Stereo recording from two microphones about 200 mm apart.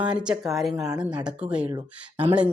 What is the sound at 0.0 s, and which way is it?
Speech, 5° right (ahead or behind).